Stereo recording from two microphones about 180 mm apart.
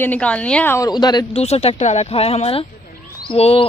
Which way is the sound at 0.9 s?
25° left (ahead or behind).